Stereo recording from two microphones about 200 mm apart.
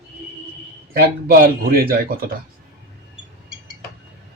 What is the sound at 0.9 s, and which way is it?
Speech, 45° right (ahead or behind).